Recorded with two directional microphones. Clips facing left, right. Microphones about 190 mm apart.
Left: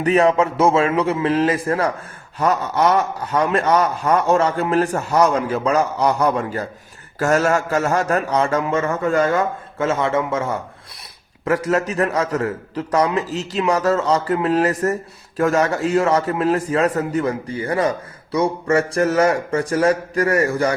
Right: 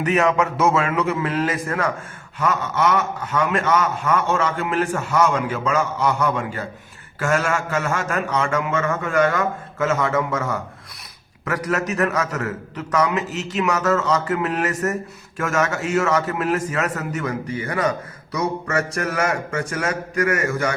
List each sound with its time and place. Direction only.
0.0 s a man's voice: 30° left (ahead or behind)